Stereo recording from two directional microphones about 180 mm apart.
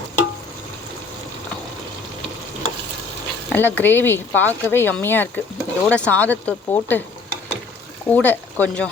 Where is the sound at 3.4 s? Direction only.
10° left (ahead or behind).